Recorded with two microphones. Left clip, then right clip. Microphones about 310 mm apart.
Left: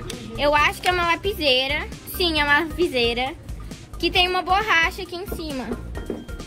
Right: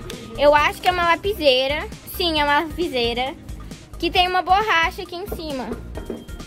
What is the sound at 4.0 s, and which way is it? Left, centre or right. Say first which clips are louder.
Speech: right 1 dB; right.